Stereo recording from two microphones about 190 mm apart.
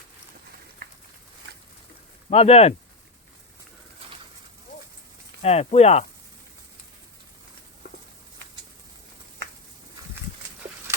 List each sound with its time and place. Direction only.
2.3 s speech: 30° left (ahead or behind)
5.4 s speech: 35° left (ahead or behind)